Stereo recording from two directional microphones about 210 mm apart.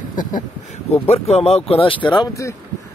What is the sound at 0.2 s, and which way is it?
Speech, 40° left (ahead or behind).